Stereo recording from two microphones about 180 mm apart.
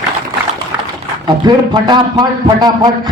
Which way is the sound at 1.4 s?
25° right (ahead or behind).